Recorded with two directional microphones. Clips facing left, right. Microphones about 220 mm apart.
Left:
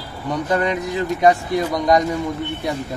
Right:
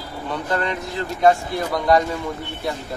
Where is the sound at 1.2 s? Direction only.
15° left (ahead or behind).